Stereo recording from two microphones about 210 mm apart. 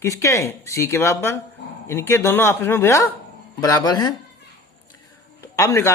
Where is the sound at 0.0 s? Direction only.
15° left (ahead or behind).